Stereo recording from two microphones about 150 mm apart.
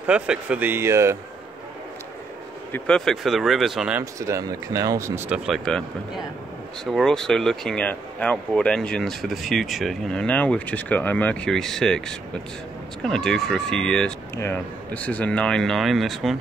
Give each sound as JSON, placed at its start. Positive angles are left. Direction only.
{"t": 0.0, "sound": "speech", "side_deg": -10}
{"t": 2.7, "sound": "speech", "side_deg": 5}
{"t": 4.0, "sound": "speech", "side_deg": -20}
{"t": 5.3, "sound": "speech", "side_deg": -5}